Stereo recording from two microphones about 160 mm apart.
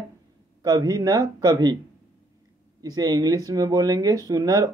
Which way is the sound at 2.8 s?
25° right (ahead or behind).